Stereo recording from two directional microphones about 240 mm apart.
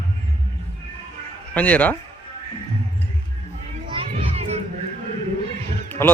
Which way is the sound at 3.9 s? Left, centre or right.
Right.